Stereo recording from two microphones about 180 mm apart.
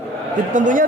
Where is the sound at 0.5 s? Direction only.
45° right (ahead or behind).